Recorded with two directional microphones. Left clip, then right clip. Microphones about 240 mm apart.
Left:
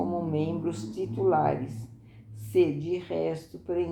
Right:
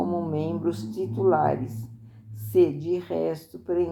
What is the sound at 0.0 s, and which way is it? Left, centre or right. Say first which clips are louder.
A woman's voice: right 2 dB; right.